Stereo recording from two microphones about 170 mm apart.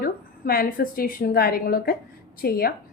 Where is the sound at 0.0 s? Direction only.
60° left (ahead or behind).